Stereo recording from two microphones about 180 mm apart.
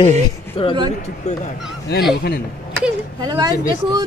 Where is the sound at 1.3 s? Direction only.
40° left (ahead or behind).